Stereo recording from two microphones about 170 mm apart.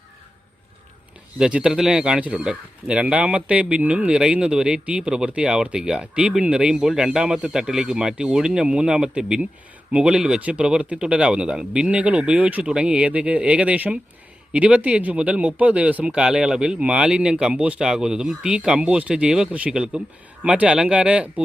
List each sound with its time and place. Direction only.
1.4 s speech: 5° right (ahead or behind)